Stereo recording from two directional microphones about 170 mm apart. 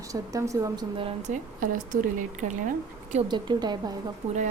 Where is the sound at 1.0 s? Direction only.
35° right (ahead or behind).